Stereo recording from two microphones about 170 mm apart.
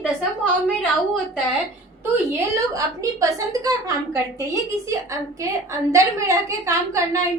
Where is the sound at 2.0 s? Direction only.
15° right (ahead or behind).